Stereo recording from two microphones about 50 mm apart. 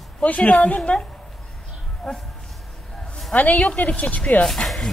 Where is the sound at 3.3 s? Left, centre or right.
Left.